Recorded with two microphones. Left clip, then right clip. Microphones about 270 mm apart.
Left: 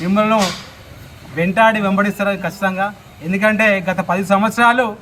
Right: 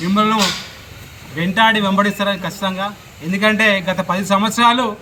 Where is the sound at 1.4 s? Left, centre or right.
Centre.